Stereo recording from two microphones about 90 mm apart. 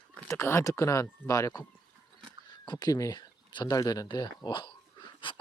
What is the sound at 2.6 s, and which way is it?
Speech, 50° left (ahead or behind).